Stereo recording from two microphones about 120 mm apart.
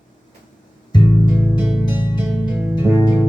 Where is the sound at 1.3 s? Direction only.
15° right (ahead or behind).